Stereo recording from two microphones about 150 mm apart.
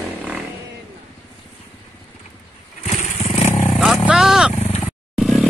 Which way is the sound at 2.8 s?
45° left (ahead or behind).